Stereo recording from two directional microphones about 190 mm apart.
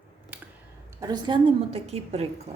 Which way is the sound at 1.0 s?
20° right (ahead or behind).